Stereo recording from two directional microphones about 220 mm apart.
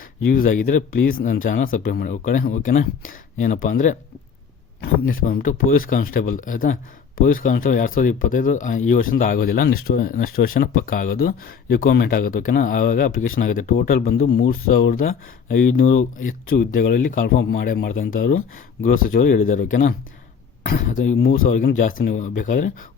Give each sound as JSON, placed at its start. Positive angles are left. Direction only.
{"t": 0.3, "sound": "speech", "side_deg": 40}
{"t": 5.3, "sound": "speech", "side_deg": 40}